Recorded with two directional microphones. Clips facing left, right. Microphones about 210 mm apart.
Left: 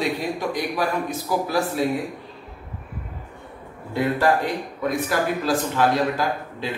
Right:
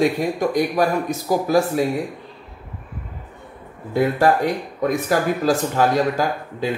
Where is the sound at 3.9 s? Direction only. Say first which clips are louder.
Right 3 dB; 40° right (ahead or behind).